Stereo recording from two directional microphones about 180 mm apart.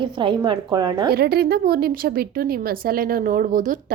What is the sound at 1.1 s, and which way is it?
A woman's voice, 60° right (ahead or behind).